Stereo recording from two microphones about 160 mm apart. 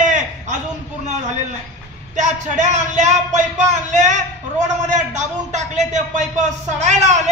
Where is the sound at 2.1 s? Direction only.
50° right (ahead or behind).